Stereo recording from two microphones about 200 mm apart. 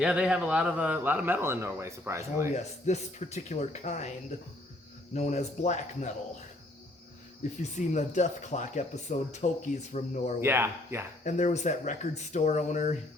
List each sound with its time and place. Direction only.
0.0 s a man's voice: 5° right (ahead or behind)
2.5 s speech: 35° left (ahead or behind)
5.1 s speech: 35° left (ahead or behind)
7.6 s speech: 35° left (ahead or behind)
10.4 s a man's voice: 10° right (ahead or behind)
11.2 s speech: 40° left (ahead or behind)